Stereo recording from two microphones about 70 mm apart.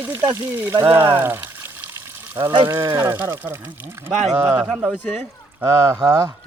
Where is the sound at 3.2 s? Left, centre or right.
Right.